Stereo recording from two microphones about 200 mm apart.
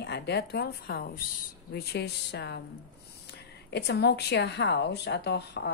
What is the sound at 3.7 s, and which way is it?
Speech, 55° left (ahead or behind).